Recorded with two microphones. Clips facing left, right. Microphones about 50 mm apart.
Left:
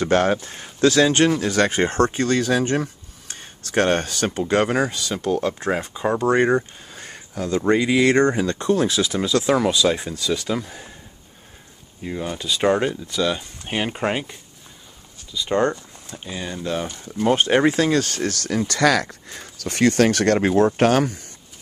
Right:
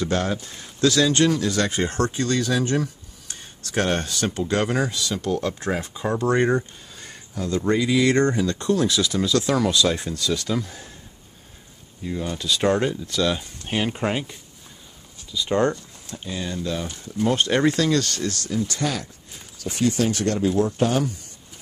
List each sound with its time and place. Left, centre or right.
0.0 s speech: left; by 6.6 s centre
6.9 s a sound: left
7.5 s speech: left
8.1 s speech: centre
12.0 s speech: left
12.3 s speech: centre
15.7 s speech: centre
17.3 s speech: left
18.2 s speech: left